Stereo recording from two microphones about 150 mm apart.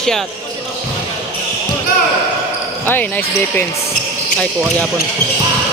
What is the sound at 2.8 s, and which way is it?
Speech, 10° left (ahead or behind).